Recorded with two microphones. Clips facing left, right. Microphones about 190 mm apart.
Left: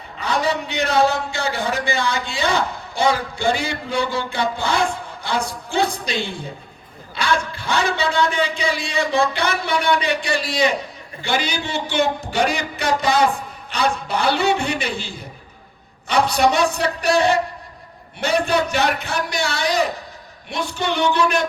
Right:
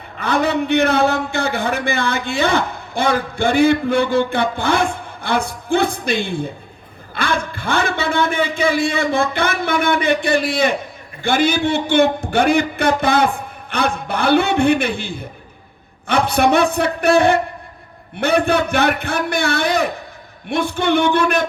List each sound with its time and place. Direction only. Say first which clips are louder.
0.2 s a man's voice: right 4 dB; 55° right (ahead or behind)